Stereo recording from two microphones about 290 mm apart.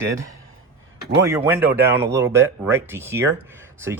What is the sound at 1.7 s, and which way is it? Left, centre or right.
Speech, right.